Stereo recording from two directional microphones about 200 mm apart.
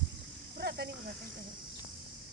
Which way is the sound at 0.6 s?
55° right (ahead or behind).